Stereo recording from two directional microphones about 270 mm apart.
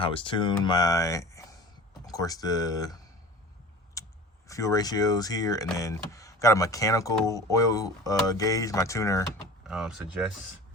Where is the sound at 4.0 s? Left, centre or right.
Centre.